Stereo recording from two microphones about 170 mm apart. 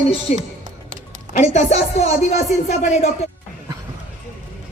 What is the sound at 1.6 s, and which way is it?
Music, 40° left (ahead or behind).